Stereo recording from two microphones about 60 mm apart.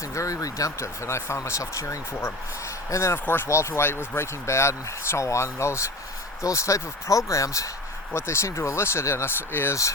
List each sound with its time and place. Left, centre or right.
0.1 s speech: left
0.8 s speech: left
3.2 s speech: left
3.5 s speech: left
8.1 s speech: left